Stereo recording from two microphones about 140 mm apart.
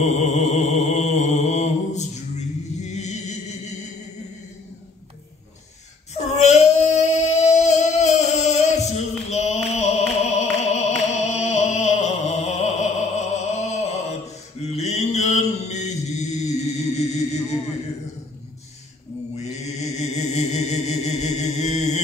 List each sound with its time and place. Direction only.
0.0 s mantra: 55° left (ahead or behind)
6.1 s a sound: 55° left (ahead or behind)
14.6 s mantra: 50° left (ahead or behind)
19.3 s mantra: 50° left (ahead or behind)